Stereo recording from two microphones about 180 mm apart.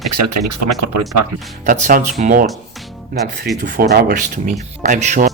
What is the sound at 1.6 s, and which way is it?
Speech, 45° right (ahead or behind).